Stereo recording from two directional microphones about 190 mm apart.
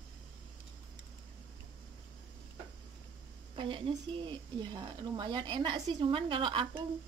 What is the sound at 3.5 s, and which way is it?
Speech, 25° right (ahead or behind).